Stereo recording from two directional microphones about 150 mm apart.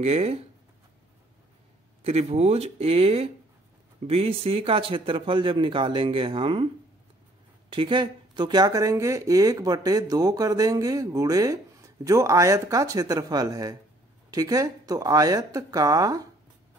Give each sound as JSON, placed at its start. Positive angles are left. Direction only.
{"t": 0.0, "sound": "speech", "side_deg": -45}
{"t": 2.0, "sound": "a man's voice", "side_deg": -45}
{"t": 7.7, "sound": "speech", "side_deg": -35}